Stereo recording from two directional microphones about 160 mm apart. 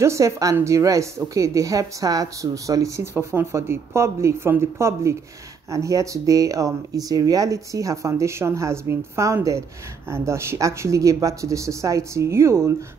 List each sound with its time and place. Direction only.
0.0 s speech: 20° right (ahead or behind)